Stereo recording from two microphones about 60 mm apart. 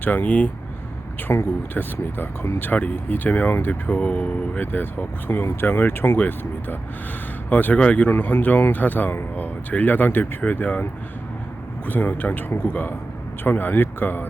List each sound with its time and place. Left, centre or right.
0.0 s speech: left
1.3 s speech: left
1.7 s speech: left
8.1 s speech: left
11.9 s speech: left